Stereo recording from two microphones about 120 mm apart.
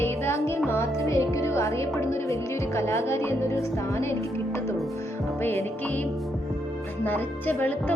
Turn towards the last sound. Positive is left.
turn(degrees=15)  # may be behind; listen again after turning